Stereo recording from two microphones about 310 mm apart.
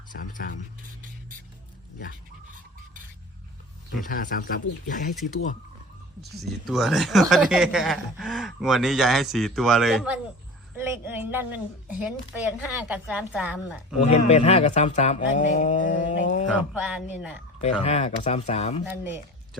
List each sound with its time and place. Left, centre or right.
0.1 s speech: left
4.0 s speech: left
6.7 s speech: centre
14.0 s speech: left
16.5 s speech: centre
17.6 s speech: left